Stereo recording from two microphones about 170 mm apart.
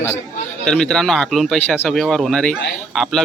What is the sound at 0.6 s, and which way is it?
A man's voice, 5° left (ahead or behind).